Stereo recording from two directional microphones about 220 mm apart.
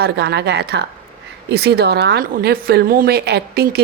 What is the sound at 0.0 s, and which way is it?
A woman's voice, 50° right (ahead or behind).